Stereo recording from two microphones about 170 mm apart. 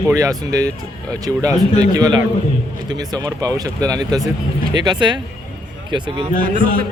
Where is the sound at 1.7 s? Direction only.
20° right (ahead or behind).